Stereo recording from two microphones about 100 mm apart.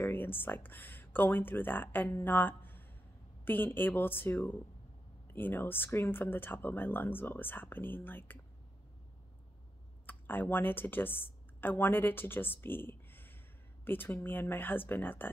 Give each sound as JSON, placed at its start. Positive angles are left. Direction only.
{"t": 0.0, "sound": "speech", "side_deg": 20}
{"t": 10.0, "sound": "speech", "side_deg": 20}